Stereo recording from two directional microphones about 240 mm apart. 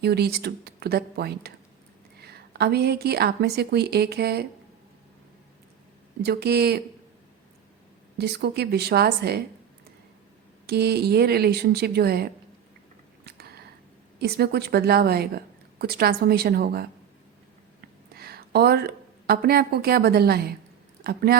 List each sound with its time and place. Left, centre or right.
0.0 s a woman's voice: right
6.2 s speech: right
8.2 s a woman's voice: right
10.7 s a woman's voice: right
13.2 s a sound: right
14.2 s a woman's voice: right
17.7 s a sound: right
21.0 s a woman's voice: right